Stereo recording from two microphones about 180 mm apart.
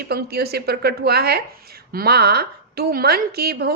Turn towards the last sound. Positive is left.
turn(degrees=-60)  # may be behind; listen again after turning